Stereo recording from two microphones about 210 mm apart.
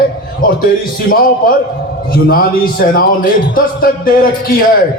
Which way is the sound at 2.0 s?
45° left (ahead or behind).